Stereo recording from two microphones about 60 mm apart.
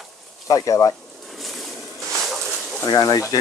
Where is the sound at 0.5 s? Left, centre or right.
Left.